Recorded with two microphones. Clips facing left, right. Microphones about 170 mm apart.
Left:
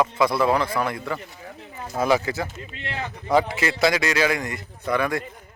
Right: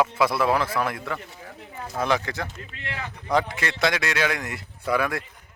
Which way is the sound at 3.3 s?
5° left (ahead or behind).